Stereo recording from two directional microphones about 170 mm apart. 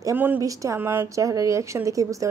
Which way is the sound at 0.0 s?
10° right (ahead or behind).